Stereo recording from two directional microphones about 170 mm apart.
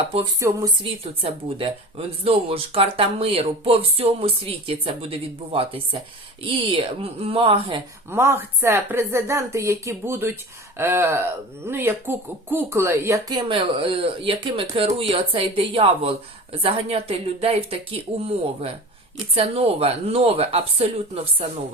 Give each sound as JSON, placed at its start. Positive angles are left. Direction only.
{"t": 0.3, "sound": "speech", "side_deg": -20}
{"t": 1.2, "sound": "speech", "side_deg": -35}
{"t": 8.1, "sound": "a woman's voice", "side_deg": -15}